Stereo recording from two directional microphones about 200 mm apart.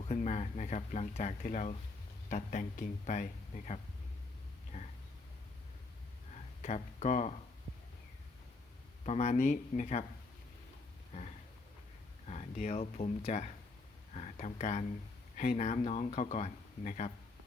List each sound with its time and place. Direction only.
0.1 s speech: 35° left (ahead or behind)
4.7 s a sound: 35° left (ahead or behind)
6.6 s speech: 35° left (ahead or behind)
9.0 s speech: 35° left (ahead or behind)
12.3 s speech: 35° left (ahead or behind)